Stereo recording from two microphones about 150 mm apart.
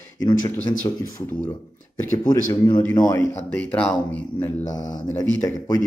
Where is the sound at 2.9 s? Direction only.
25° left (ahead or behind).